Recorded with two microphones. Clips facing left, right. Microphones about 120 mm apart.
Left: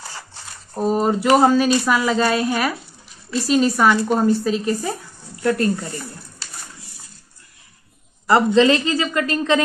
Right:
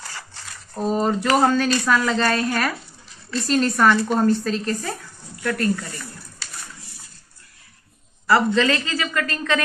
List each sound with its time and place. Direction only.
0.7 s speech: 10° left (ahead or behind)
5.4 s speech: 25° left (ahead or behind)
8.5 s speech: 20° left (ahead or behind)